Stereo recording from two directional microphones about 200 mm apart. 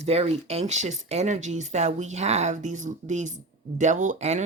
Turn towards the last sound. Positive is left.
turn(degrees=-35)  # may be behind; listen again after turning